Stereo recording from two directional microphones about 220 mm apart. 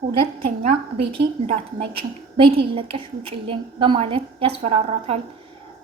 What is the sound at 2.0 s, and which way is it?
A woman's voice, 25° right (ahead or behind).